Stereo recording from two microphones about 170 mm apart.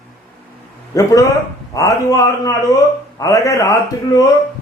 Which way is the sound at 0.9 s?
20° left (ahead or behind).